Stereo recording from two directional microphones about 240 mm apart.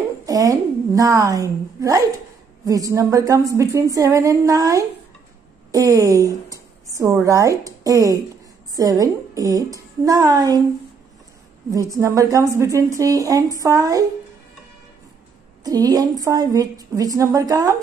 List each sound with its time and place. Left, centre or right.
0.2 s a woman's voice: centre
11.9 s a woman's voice: centre
15.6 s a woman's voice: centre